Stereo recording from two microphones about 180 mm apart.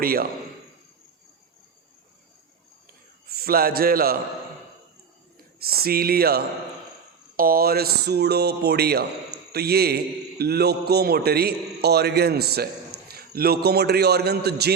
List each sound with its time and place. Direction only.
0.0 s speech: 55° right (ahead or behind)
3.2 s a man's voice: 55° right (ahead or behind)
5.5 s speech: 55° right (ahead or behind)